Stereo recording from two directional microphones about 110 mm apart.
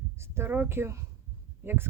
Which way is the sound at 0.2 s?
25° right (ahead or behind).